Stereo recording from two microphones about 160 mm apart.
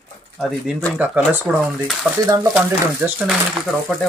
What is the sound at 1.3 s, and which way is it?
Speech, 10° right (ahead or behind).